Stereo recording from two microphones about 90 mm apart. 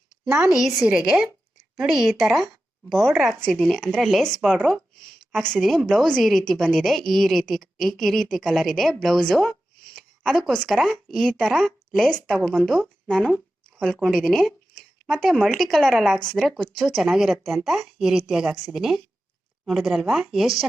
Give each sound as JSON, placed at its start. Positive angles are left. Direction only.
{"t": 0.4, "sound": "a woman's voice", "side_deg": -5}